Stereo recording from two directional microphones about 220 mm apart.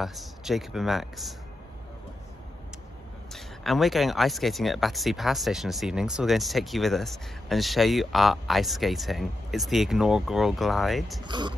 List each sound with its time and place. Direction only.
0.0 s speech: centre (ahead or behind)
3.3 s speech: centre (ahead or behind)
11.2 s speech: 20° right (ahead or behind)